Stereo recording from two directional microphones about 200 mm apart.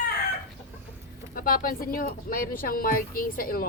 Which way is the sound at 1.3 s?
45° left (ahead or behind).